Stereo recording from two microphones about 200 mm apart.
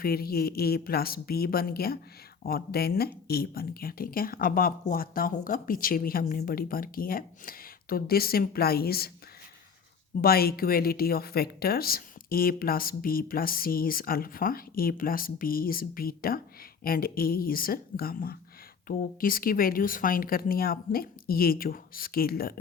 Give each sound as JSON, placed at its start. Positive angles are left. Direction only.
{"t": 0.0, "sound": "speech", "side_deg": 50}
{"t": 10.2, "sound": "speech", "side_deg": 50}